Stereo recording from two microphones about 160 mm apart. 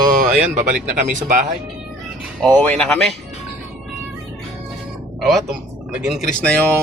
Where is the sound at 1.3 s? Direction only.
55° right (ahead or behind).